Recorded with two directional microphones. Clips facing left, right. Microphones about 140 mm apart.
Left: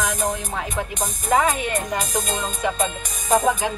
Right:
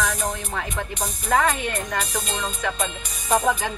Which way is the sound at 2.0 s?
45° left (ahead or behind).